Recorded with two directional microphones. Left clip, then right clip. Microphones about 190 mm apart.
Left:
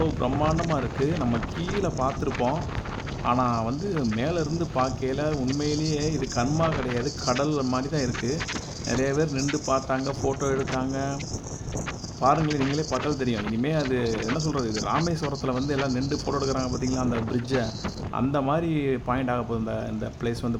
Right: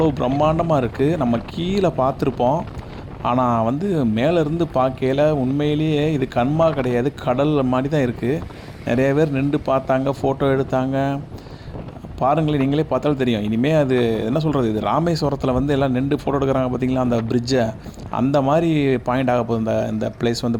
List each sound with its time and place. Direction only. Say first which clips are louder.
0.2 s speech: right 7 dB; 30° right (ahead or behind)
12.2 s speech: right 4 dB; 30° right (ahead or behind)